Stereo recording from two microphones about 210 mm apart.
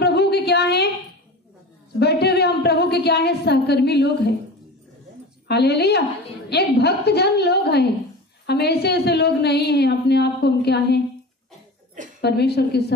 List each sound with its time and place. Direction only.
0.0 s a sound: 50° left (ahead or behind)
2.0 s a woman's voice: 50° left (ahead or behind)
5.5 s a woman's voice: 50° left (ahead or behind)
12.2 s a woman's voice: 50° left (ahead or behind)